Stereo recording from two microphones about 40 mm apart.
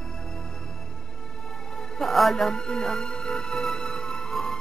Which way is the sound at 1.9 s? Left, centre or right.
Centre.